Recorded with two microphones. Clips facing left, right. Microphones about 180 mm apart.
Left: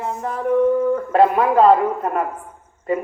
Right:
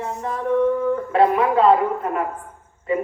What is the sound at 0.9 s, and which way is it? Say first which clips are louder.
Speech: left 2 dB; 40° left (ahead or behind).